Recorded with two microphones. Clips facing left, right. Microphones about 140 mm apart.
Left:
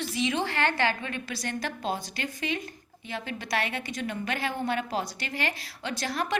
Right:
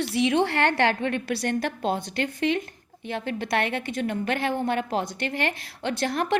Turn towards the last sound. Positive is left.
turn(degrees=-55)  # may be behind; listen again after turning